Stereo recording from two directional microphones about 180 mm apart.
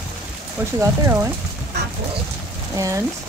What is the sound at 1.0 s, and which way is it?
Speech, 15° right (ahead or behind).